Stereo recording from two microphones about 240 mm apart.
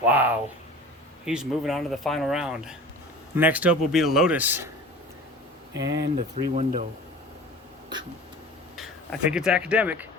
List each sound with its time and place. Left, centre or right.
0.0 s speech: centre
5.7 s speech: centre
6.0 s speech: right
9.3 s speech: centre